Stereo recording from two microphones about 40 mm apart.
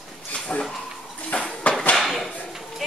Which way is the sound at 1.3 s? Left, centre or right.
Left.